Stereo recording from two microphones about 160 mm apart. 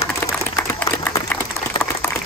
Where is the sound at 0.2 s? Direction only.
15° left (ahead or behind).